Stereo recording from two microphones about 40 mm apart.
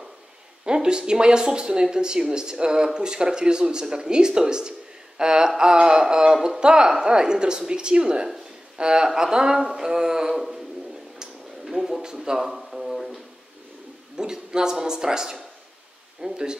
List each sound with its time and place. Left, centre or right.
0.7 s speech: right
11.6 s a sound: centre
14.1 s speech: centre